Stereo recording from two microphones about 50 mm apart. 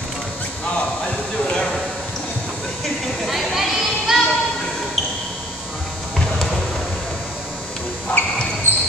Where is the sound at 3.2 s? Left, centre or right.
Centre.